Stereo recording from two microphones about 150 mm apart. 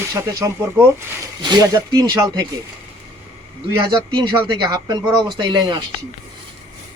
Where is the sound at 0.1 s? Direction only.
20° right (ahead or behind).